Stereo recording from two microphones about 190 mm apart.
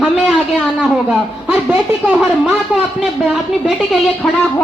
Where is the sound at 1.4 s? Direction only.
10° right (ahead or behind).